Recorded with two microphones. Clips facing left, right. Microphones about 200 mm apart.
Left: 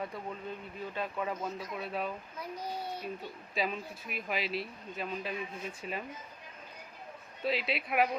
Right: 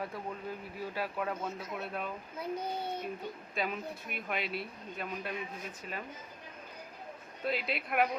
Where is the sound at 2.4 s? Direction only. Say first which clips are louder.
Right 4 dB; 25° right (ahead or behind).